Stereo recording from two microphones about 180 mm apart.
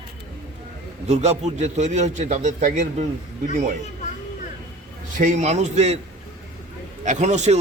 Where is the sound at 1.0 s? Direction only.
35° right (ahead or behind).